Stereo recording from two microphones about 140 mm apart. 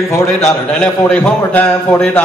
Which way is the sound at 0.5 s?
5° left (ahead or behind).